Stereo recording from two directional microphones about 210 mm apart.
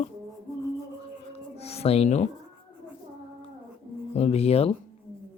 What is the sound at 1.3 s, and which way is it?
Speech, 30° left (ahead or behind).